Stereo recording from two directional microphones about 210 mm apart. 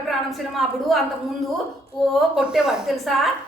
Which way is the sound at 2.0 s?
Centre (ahead or behind).